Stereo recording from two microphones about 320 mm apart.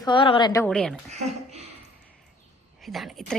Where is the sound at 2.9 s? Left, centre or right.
Centre.